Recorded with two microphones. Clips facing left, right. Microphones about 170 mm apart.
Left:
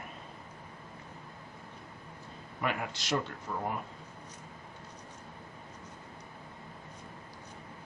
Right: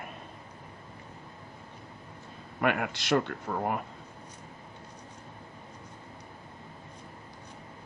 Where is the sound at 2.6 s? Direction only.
65° right (ahead or behind).